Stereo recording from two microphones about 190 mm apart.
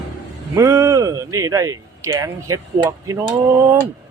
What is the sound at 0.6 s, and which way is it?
Speech, 15° right (ahead or behind).